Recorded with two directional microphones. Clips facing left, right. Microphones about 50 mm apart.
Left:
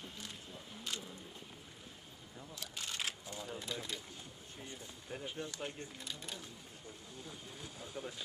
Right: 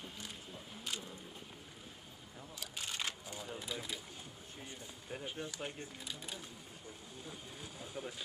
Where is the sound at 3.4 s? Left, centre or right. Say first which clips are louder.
Even; centre.